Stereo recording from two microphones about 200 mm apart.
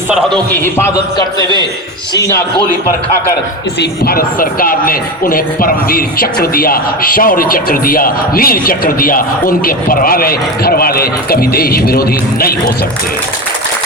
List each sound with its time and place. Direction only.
0.5 s a man's voice: 10° left (ahead or behind)
1.4 s a man's voice: 20° right (ahead or behind)
2.1 s a man's voice: 15° left (ahead or behind)
3.8 s a woman's voice: 50° left (ahead or behind)